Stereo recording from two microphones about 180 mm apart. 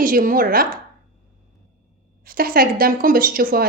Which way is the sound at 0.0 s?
50° right (ahead or behind).